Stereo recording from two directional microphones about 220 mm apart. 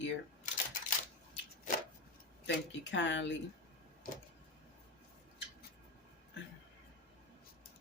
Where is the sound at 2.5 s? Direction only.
55° left (ahead or behind).